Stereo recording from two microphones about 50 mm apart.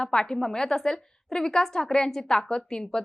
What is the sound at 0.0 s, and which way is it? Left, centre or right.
A woman's voice, centre.